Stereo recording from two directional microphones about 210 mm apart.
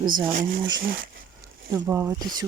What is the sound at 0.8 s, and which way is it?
Speech, 40° right (ahead or behind).